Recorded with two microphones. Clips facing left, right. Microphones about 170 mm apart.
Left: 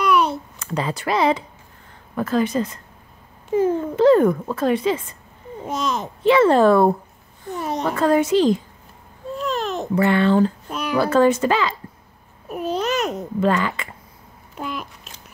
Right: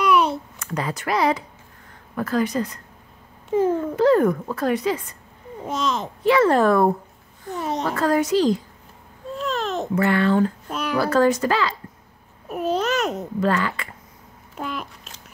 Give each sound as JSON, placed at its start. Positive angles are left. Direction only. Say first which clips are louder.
{"t": 0.0, "sound": "a sound", "louder": "even", "side_deg": -5}
{"t": 0.6, "sound": "speech", "louder": "left 2 dB", "side_deg": 25}
{"t": 3.4, "sound": "speech", "louder": "left 1 dB", "side_deg": 5}
{"t": 3.9, "sound": "speech", "louder": "left 4 dB", "side_deg": 25}
{"t": 6.2, "sound": "speech", "louder": "left 3 dB", "side_deg": 25}
{"t": 7.5, "sound": "a child's voice", "louder": "even", "side_deg": 5}
{"t": 7.8, "sound": "speech", "louder": "left 3 dB", "side_deg": 20}
{"t": 9.6, "sound": "babbling", "louder": "even", "side_deg": 5}
{"t": 9.9, "sound": "speech", "louder": "left 2 dB", "side_deg": 25}
{"t": 10.7, "sound": "speech", "louder": "left 1 dB", "side_deg": 0}
{"t": 11.0, "sound": "speech", "louder": "left 2 dB", "side_deg": 25}
{"t": 12.4, "sound": "babbling", "louder": "right 1 dB", "side_deg": 0}
{"t": 13.4, "sound": "speech", "louder": "left 2 dB", "side_deg": 20}
{"t": 14.6, "sound": "a sound", "louder": "even", "side_deg": 5}